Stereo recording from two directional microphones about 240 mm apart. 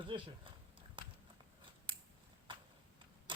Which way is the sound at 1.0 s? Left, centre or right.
Centre.